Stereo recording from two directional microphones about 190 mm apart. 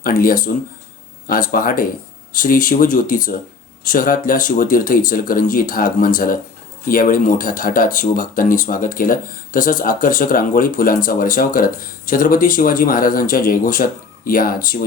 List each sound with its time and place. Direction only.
0.0 s speech: 50° left (ahead or behind)